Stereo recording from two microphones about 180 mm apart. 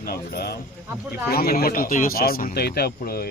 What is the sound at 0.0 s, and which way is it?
Speech, 60° left (ahead or behind).